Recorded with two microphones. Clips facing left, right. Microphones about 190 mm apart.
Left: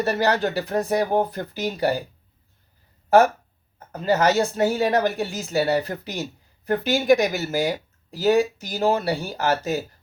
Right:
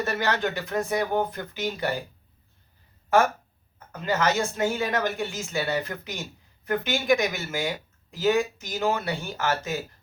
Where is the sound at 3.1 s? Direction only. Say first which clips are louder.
Left 5 dB; 35° left (ahead or behind).